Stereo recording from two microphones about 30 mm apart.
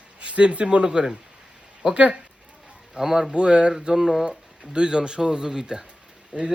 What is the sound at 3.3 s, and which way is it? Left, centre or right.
Speech, right.